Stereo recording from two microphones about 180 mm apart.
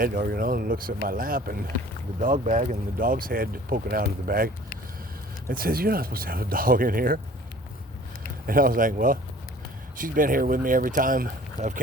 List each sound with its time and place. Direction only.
0.0 s speech: 50° right (ahead or behind)
8.4 s speech: 50° right (ahead or behind)